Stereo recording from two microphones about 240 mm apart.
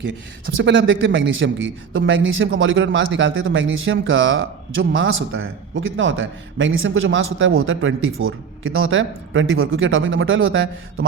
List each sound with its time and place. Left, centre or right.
0.6 s a man's voice: right